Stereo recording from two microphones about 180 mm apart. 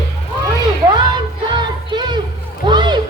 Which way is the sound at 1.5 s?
25° right (ahead or behind).